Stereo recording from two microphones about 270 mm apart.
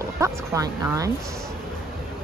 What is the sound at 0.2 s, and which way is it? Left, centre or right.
Speech, centre.